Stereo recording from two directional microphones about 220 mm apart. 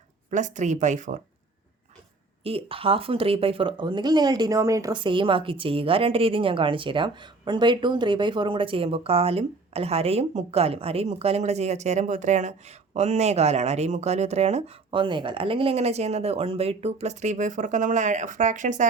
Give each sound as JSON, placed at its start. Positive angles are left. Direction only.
{"t": 0.3, "sound": "speech", "side_deg": -35}
{"t": 2.4, "sound": "speech", "side_deg": -25}